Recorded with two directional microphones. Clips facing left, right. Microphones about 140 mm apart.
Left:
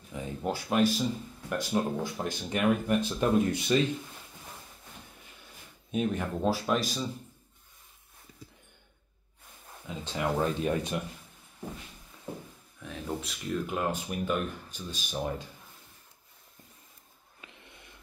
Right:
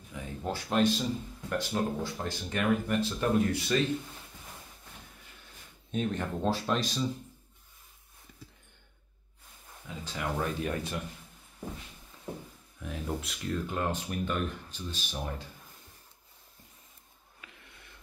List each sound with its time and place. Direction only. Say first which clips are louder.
0.1 s speech: left 3 dB; 15° left (ahead or behind)
5.9 s speech: left 2 dB; 10° left (ahead or behind)
10.0 s speech: left 4 dB; 25° left (ahead or behind)
12.8 s speech: even; centre (ahead or behind); by 15.4 s 15° left (ahead or behind)
17.4 s snort: left 2 dB; 20° left (ahead or behind)